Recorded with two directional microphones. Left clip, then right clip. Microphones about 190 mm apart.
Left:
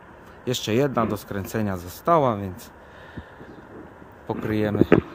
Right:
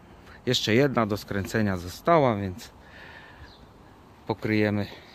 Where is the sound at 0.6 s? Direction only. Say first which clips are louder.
Left 1 dB; 25° right (ahead or behind).